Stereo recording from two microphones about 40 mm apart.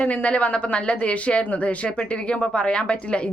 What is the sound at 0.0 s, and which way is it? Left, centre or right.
Speech, left.